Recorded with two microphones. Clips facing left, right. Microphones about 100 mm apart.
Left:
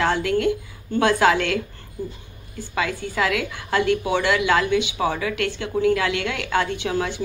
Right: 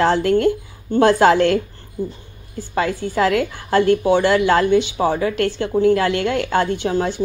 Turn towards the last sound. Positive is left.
turn(degrees=-35)  # may be behind; listen again after turning